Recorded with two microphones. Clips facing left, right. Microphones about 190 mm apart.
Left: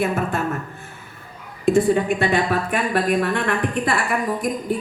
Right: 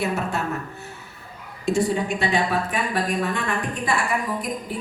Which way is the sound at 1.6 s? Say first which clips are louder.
Left 5 dB; 55° left (ahead or behind).